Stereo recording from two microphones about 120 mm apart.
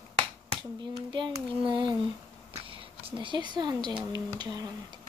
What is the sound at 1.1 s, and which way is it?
Speech, 45° right (ahead or behind).